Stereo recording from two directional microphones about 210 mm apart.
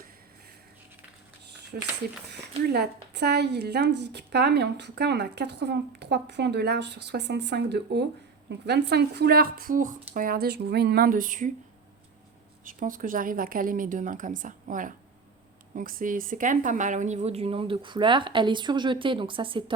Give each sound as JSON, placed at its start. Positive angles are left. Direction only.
{"t": 1.7, "sound": "speech", "side_deg": -45}
{"t": 12.6, "sound": "speech", "side_deg": -40}